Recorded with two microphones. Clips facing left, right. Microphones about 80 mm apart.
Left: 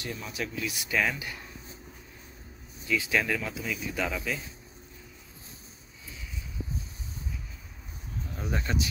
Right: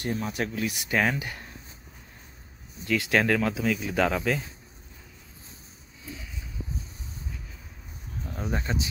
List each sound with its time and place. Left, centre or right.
0.0 s speech: right
2.8 s speech: right
8.3 s speech: right